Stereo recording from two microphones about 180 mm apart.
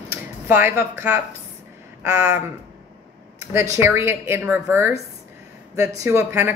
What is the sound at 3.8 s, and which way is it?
A woman's voice, 15° right (ahead or behind).